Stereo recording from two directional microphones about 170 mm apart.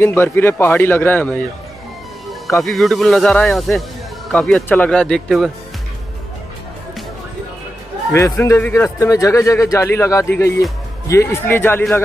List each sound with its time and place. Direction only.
0.0 s speech: 15° left (ahead or behind)
2.6 s speech: centre (ahead or behind)
8.4 s speech: 15° left (ahead or behind)